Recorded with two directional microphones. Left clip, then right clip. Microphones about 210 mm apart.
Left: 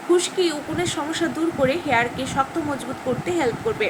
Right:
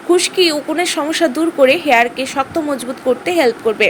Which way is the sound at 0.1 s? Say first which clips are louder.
Right 7 dB; 40° right (ahead or behind).